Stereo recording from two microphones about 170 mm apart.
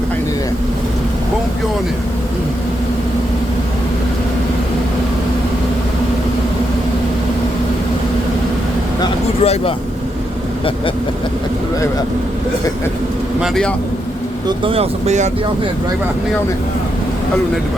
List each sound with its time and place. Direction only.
9.4 s speech: 35° left (ahead or behind)
13.4 s speech: 5° left (ahead or behind)
14.4 s speech: 30° right (ahead or behind)